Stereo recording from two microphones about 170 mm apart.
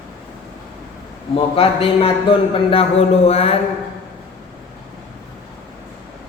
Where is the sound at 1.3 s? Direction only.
35° left (ahead or behind).